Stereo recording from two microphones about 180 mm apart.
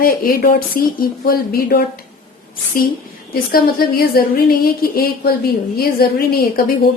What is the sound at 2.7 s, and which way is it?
A woman's voice, 50° left (ahead or behind).